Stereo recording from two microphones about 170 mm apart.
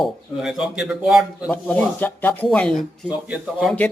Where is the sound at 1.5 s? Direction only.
10° left (ahead or behind).